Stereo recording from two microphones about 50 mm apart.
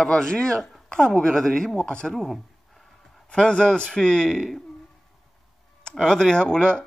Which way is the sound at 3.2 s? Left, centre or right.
Centre.